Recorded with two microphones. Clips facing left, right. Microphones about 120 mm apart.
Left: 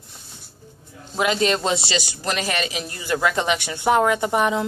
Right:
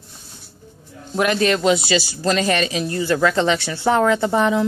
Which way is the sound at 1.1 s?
15° left (ahead or behind).